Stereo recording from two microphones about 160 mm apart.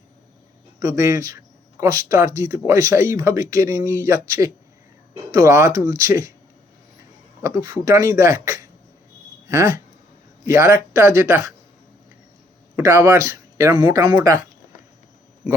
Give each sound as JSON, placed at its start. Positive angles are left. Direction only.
{"t": 0.8, "sound": "speech", "side_deg": -20}
{"t": 7.4, "sound": "speech", "side_deg": -20}
{"t": 12.7, "sound": "speech", "side_deg": -15}